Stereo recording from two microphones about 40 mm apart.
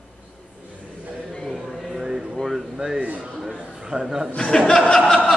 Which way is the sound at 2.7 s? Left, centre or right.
Centre.